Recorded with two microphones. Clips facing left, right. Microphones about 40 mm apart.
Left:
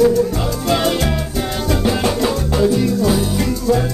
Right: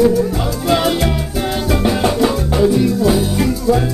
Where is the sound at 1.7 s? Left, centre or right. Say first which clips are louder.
Right 1 dB; centre.